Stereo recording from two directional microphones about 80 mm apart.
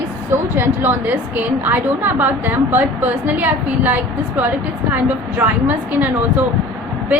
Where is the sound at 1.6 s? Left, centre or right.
Right.